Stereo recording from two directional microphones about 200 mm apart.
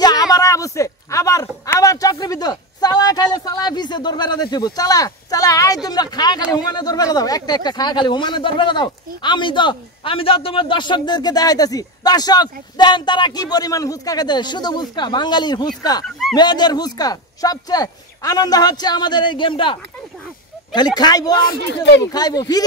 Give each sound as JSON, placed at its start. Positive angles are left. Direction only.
{"t": 0.0, "sound": "a sound", "side_deg": 20}
{"t": 5.9, "sound": "speech", "side_deg": 20}
{"t": 21.5, "sound": "speech", "side_deg": 60}
{"t": 22.1, "sound": "speech", "side_deg": 20}